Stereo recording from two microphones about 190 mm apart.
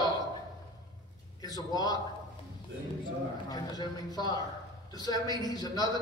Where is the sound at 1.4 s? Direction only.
20° left (ahead or behind).